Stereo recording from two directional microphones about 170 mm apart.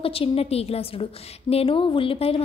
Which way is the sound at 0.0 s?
35° left (ahead or behind).